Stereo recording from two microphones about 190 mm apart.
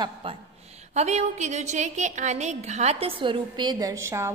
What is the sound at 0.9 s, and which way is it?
A woman's voice, 35° right (ahead or behind).